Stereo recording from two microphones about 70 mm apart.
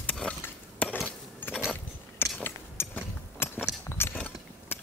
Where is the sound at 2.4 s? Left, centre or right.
Left.